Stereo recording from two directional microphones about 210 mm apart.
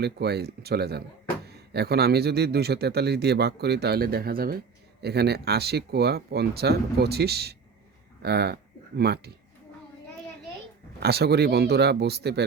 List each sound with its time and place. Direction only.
0.0 s speech: 50° right (ahead or behind)
11.0 s speech: 50° right (ahead or behind)